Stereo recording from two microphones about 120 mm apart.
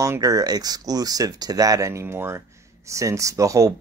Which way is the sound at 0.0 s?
30° right (ahead or behind).